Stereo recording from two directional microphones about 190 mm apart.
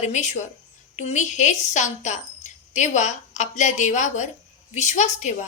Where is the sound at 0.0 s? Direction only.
35° left (ahead or behind).